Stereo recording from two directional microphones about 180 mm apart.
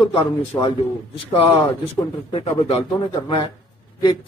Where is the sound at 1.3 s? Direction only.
30° left (ahead or behind).